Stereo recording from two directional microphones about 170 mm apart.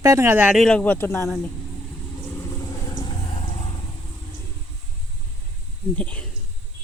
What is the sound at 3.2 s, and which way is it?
Vehicle, 35° left (ahead or behind).